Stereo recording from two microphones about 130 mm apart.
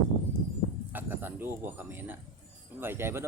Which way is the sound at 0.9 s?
15° right (ahead or behind).